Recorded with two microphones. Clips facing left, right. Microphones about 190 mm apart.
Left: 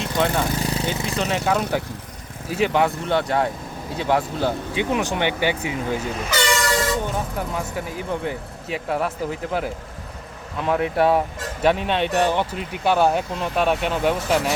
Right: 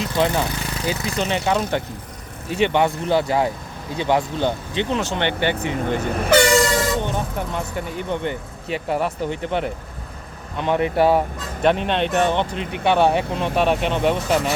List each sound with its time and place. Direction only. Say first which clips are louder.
0.0 s speech: right 1 dB; centre (ahead or behind)
0.6 s a sound: left 4 dB; 30° left (ahead or behind)
1.0 s speech: right 2 dB; centre (ahead or behind)
6.0 s speech: right 8 dB; 55° right (ahead or behind)
7.0 s speech: right 1 dB; 5° left (ahead or behind)